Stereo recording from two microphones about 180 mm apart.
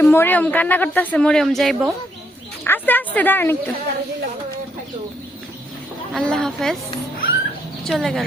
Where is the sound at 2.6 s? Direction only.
10° left (ahead or behind).